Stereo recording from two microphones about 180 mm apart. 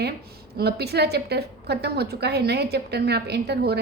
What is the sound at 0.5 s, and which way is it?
A woman's voice, 65° right (ahead or behind).